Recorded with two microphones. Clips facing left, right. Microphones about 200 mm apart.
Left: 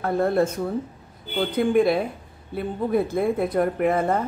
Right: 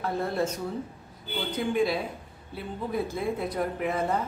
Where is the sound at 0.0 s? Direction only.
55° left (ahead or behind).